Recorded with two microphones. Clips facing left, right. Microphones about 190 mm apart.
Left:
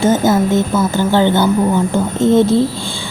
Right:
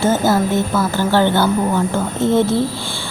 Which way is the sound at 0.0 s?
20° left (ahead or behind).